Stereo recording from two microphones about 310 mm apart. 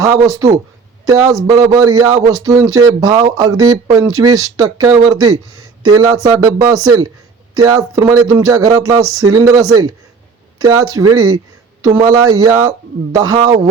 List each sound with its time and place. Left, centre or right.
0.0 s speech: centre
9.2 s speech: right
9.5 s speech: centre